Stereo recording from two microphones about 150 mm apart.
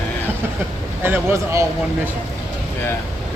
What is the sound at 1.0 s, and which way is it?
Speech, 15° right (ahead or behind).